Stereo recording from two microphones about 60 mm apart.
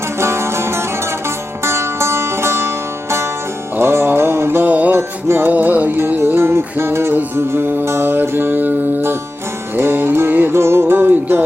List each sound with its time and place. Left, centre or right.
0.2 s music: right
4.7 s music: right
4.9 s music: right
5.5 s music: right
6.0 s music: right